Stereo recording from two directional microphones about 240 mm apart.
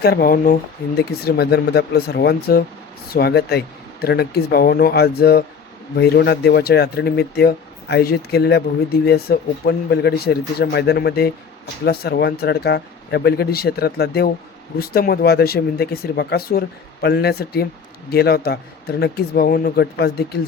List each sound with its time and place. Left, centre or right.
0.0 s speech: left